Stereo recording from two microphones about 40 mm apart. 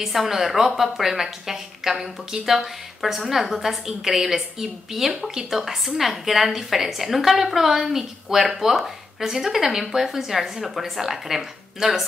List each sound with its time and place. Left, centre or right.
0.0 s a woman's voice: centre